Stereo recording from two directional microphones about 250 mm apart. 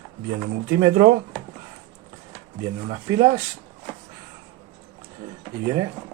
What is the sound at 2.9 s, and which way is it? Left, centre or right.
Speech, centre.